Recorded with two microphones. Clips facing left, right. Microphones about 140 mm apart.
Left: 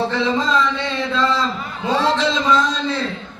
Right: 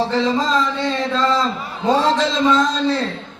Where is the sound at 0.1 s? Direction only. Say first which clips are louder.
Right 1 dB; 40° right (ahead or behind).